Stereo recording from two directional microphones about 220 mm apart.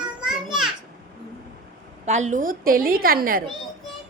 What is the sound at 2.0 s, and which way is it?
A woman's voice, 30° right (ahead or behind).